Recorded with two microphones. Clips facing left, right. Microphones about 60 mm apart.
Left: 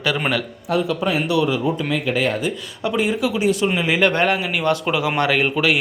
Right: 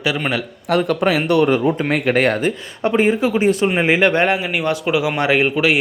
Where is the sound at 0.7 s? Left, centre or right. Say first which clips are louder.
Right 4 dB; right.